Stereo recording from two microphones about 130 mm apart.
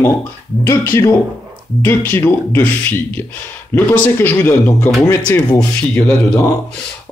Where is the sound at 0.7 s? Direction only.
20° left (ahead or behind).